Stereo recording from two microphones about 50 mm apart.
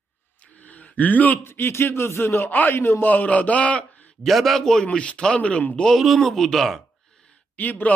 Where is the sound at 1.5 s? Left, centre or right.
Left.